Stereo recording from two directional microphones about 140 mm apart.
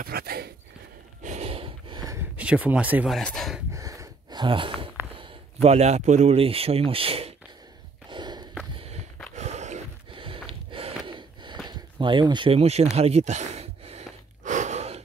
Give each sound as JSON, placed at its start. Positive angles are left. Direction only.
{"t": 0.0, "sound": "a sound", "side_deg": -90}
{"t": 1.2, "sound": "gasp", "side_deg": -50}
{"t": 2.3, "sound": "speech", "side_deg": -10}
{"t": 3.2, "sound": "speech", "side_deg": 5}
{"t": 3.7, "sound": "gasp", "side_deg": -25}
{"t": 5.1, "sound": "a man's voice", "side_deg": -45}
{"t": 8.1, "sound": "walk", "side_deg": -30}
{"t": 8.7, "sound": "walk", "side_deg": -45}
{"t": 9.3, "sound": "a sound", "side_deg": -55}
{"t": 10.1, "sound": "sniff", "side_deg": -40}
{"t": 10.7, "sound": "gasp", "side_deg": -40}
{"t": 11.6, "sound": "speech", "side_deg": -35}
{"t": 12.9, "sound": "gasp", "side_deg": -50}